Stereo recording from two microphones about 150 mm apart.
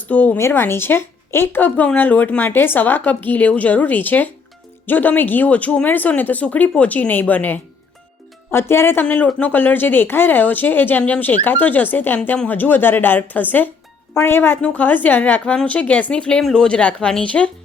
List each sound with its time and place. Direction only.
0.1 s a woman's voice: 10° left (ahead or behind)